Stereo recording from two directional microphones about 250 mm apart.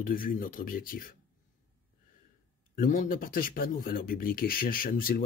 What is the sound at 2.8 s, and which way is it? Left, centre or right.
Speech, left.